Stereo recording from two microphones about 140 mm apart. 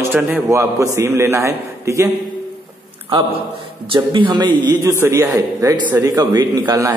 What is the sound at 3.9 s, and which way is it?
A man's voice, 35° right (ahead or behind).